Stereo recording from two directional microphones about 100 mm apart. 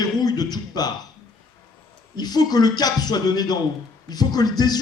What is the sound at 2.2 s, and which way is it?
Speech, 45° left (ahead or behind).